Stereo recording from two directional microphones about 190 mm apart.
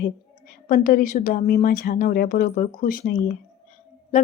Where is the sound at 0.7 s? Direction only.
45° left (ahead or behind).